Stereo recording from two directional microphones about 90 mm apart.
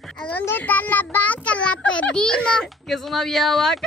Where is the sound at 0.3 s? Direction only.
20° left (ahead or behind).